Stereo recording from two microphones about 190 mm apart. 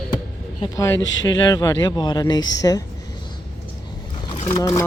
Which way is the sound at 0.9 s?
75° left (ahead or behind).